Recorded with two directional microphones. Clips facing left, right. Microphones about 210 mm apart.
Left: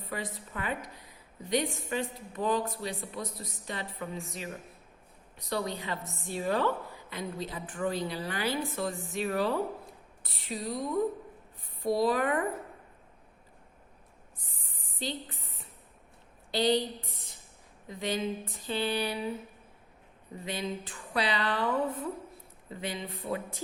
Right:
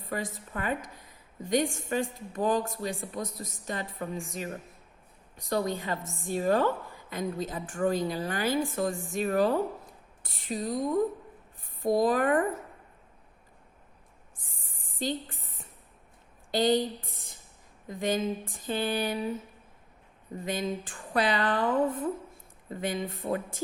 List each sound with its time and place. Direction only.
0.0 s a woman's voice: 45° right (ahead or behind)
14.9 s a sound: 45° right (ahead or behind)
16.5 s speech: 45° right (ahead or behind)
17.8 s a woman's voice: 45° right (ahead or behind)
20.4 s a woman's voice: 45° right (ahead or behind)